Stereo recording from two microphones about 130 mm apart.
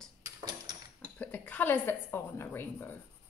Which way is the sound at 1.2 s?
10° left (ahead or behind).